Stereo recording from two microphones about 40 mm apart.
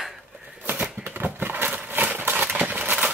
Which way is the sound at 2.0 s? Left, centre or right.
Right.